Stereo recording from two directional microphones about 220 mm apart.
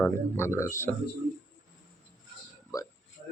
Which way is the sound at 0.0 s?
10° left (ahead or behind).